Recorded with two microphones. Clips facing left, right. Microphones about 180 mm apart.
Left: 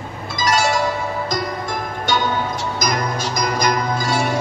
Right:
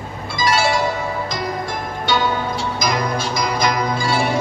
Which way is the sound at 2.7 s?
45° left (ahead or behind).